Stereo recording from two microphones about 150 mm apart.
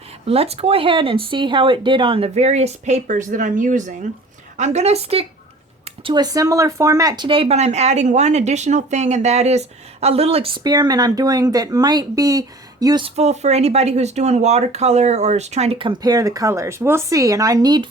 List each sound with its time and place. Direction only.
0.3 s speech: 40° right (ahead or behind)
6.1 s speech: 25° right (ahead or behind)
13.1 s speech: 45° right (ahead or behind); by 17.8 s 25° right (ahead or behind)